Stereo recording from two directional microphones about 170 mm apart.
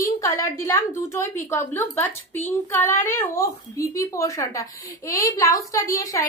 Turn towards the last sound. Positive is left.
turn(degrees=20)  # may be behind; listen again after turning